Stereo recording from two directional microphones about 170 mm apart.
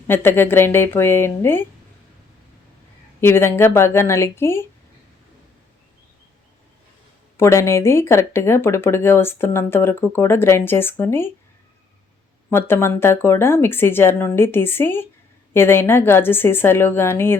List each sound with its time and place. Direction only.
0.1 s speech: 10° left (ahead or behind)
3.2 s speech: 15° left (ahead or behind)
7.3 s speech: 15° left (ahead or behind)
12.5 s speech: 15° left (ahead or behind)